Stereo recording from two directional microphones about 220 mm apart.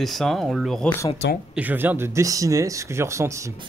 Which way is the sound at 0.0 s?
Centre (ahead or behind).